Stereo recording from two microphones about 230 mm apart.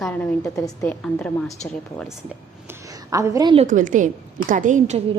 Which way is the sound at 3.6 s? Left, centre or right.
Right.